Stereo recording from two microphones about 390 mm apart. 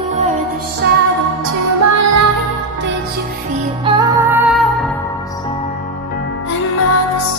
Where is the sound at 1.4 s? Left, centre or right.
Right.